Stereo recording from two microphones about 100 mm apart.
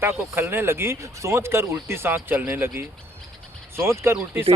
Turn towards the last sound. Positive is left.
turn(degrees=-25)  # may be behind; listen again after turning